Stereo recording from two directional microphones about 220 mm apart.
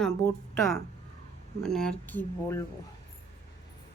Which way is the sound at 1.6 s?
5° left (ahead or behind).